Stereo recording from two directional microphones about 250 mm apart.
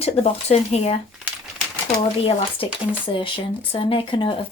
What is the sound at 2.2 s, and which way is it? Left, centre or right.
Speech, left.